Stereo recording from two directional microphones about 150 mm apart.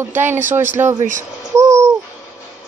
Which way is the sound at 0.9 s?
55° right (ahead or behind).